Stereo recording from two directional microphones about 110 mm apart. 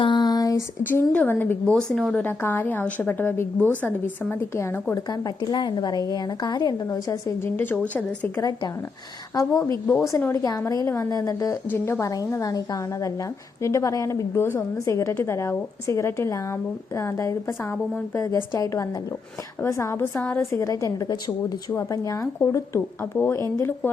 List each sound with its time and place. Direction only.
0.0 s a sound: 45° left (ahead or behind)
0.9 s a woman's voice: 15° left (ahead or behind)
2.2 s a woman's voice: 20° left (ahead or behind)
4.9 s a woman's voice: 35° left (ahead or behind); by 8.3 s 10° left (ahead or behind)
8.4 s a woman's voice: 35° left (ahead or behind)